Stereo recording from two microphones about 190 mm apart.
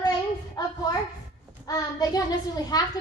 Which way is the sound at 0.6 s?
20° left (ahead or behind).